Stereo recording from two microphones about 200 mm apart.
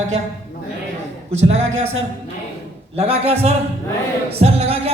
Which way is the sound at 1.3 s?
35° right (ahead or behind).